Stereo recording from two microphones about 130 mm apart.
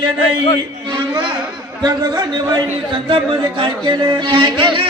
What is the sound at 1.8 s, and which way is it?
A man's voice, 30° right (ahead or behind).